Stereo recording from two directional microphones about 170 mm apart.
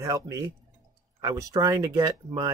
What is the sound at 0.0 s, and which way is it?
Speech, 20° right (ahead or behind).